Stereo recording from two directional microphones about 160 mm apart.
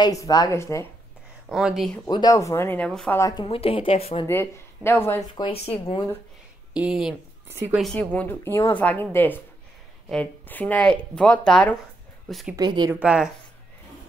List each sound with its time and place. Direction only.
0.0 s speech: 20° left (ahead or behind)
1.5 s speech: 5° right (ahead or behind)
2.0 s a woman's voice: 25° left (ahead or behind); by 3.2 s 5° left (ahead or behind)
3.2 s speech: 20° left (ahead or behind)
3.4 s a woman's voice: 35° left (ahead or behind)
4.3 s a woman's voice: 15° left (ahead or behind)
5.4 s a woman's voice: 35° left (ahead or behind)
6.7 s speech: 5° right (ahead or behind)
7.4 s a woman's voice: 15° right (ahead or behind)
7.7 s a woman's voice: 5° left (ahead or behind)
12.5 s speech: 25° right (ahead or behind)
13.0 s a woman's voice: 5° right (ahead or behind)